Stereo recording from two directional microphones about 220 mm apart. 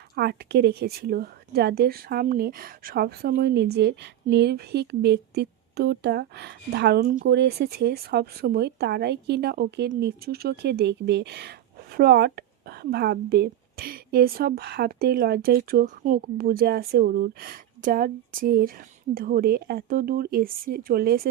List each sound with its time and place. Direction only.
0.2 s a woman's voice: 50° right (ahead or behind)